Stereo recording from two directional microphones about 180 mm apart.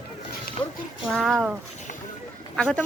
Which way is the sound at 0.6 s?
35° left (ahead or behind).